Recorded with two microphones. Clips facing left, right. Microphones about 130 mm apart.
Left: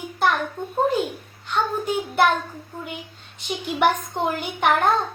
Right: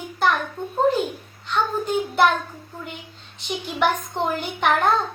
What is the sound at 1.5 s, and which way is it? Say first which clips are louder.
Speech: right 1 dB; 10° left (ahead or behind).